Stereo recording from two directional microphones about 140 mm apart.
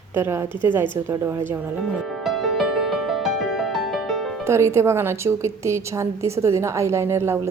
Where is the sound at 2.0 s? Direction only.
Centre (ahead or behind).